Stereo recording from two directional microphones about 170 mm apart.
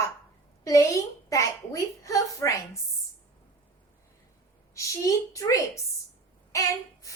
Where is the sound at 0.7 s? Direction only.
20° left (ahead or behind).